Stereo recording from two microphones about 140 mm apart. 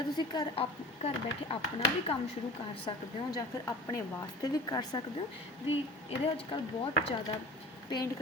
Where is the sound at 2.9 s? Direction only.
25° left (ahead or behind).